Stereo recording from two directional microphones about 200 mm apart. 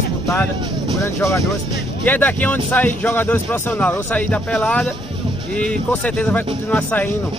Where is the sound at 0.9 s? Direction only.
15° left (ahead or behind).